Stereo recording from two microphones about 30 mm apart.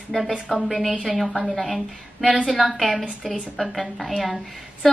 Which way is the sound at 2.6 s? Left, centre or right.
Centre.